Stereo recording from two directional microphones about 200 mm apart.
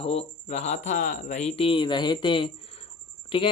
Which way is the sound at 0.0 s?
30° left (ahead or behind).